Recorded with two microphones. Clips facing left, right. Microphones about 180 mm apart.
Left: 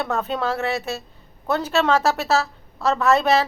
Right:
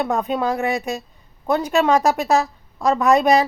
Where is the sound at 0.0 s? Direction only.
15° right (ahead or behind).